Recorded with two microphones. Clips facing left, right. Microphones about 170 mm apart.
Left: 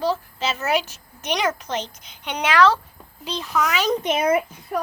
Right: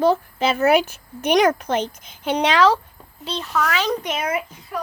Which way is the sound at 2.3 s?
25° right (ahead or behind).